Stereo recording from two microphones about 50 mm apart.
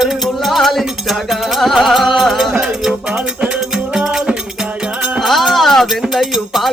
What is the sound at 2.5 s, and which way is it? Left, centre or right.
Music, centre.